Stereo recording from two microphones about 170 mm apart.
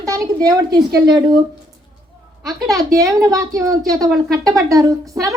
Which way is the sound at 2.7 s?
20° right (ahead or behind).